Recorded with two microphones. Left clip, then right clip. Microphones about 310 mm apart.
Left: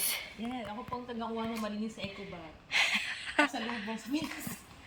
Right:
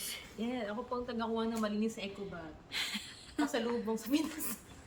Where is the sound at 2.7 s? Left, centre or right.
Centre.